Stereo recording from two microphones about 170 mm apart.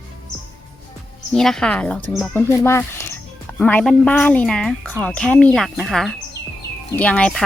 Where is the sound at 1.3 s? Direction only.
5° left (ahead or behind).